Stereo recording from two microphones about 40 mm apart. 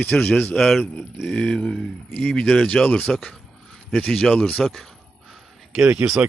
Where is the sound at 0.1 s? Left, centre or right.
Centre.